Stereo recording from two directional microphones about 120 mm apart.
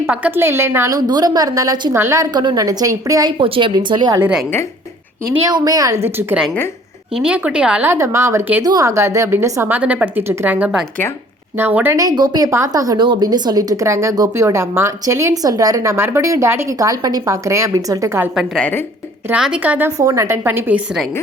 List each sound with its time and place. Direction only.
0.0 s speech: 15° right (ahead or behind)
0.9 s speech: 35° right (ahead or behind)
2.3 s speech: 35° right (ahead or behind)
3.4 s speech: 45° right (ahead or behind)
5.5 s speech: 30° right (ahead or behind)
7.2 s speech: 10° right (ahead or behind)
7.9 s speech: 25° right (ahead or behind)
8.6 s speech: 30° right (ahead or behind)
11.9 s speech: 35° right (ahead or behind)
18.5 s speech: 15° left (ahead or behind)
19.3 s speech: 10° right (ahead or behind)
20.0 s speech: 25° right (ahead or behind)